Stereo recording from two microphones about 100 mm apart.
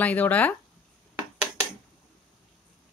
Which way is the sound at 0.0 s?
15° left (ahead or behind).